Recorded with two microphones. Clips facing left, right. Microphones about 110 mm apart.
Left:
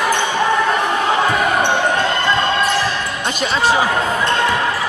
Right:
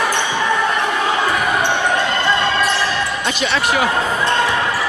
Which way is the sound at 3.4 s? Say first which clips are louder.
Left 3 dB; 35° left (ahead or behind).